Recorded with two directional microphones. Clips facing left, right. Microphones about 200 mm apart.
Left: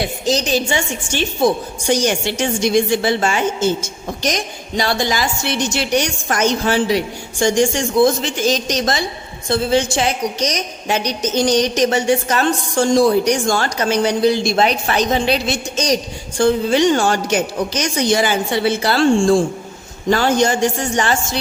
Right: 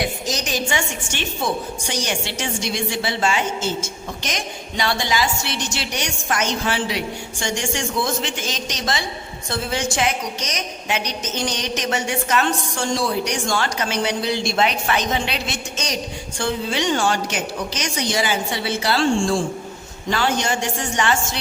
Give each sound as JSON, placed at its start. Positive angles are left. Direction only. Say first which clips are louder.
{"t": 0.0, "sound": "a woman's voice", "louder": "left 6 dB", "side_deg": 30}
{"t": 1.9, "sound": "a woman's voice", "louder": "left 10 dB", "side_deg": 45}
{"t": 9.5, "sound": "a woman's voice", "louder": "left 8 dB", "side_deg": 30}